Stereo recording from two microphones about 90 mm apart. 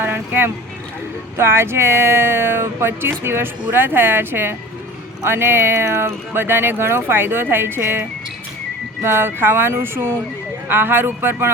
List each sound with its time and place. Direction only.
0.0 s vehicle: 25° right (ahead or behind)
1.4 s speech: 25° right (ahead or behind)